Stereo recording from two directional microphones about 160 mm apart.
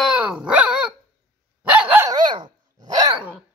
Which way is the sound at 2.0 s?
25° right (ahead or behind).